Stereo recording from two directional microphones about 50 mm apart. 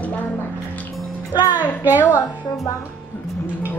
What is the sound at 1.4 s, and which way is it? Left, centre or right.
Speech, right.